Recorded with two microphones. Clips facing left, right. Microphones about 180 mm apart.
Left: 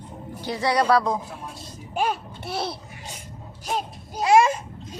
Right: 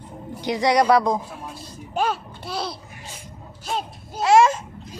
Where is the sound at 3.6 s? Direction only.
15° left (ahead or behind).